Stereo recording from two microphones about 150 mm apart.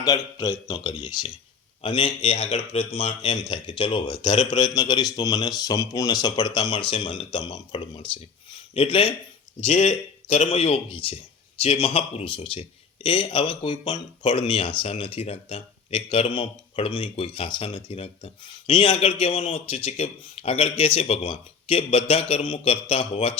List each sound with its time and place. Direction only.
0.0 s speech: 25° left (ahead or behind)
0.7 s speech: 35° left (ahead or behind)
9.7 s speech: 55° left (ahead or behind); by 23.3 s 40° left (ahead or behind)